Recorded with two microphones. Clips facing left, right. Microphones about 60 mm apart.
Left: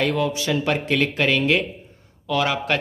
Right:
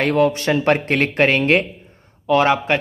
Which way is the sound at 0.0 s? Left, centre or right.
Right.